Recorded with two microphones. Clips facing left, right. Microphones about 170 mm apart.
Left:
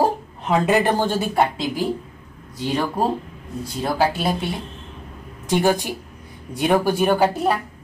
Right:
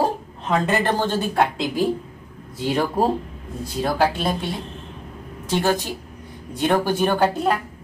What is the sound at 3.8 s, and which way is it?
Speech, 5° left (ahead or behind).